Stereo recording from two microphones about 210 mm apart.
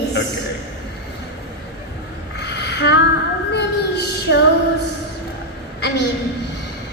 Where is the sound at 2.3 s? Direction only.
55° left (ahead or behind).